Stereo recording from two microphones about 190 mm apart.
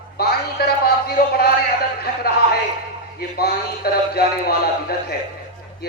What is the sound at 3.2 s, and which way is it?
A man's voice, 55° left (ahead or behind).